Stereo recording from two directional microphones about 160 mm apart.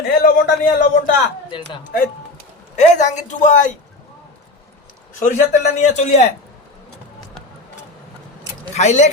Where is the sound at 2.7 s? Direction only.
45° left (ahead or behind).